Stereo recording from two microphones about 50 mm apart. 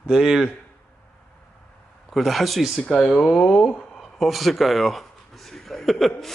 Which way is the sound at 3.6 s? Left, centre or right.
Left.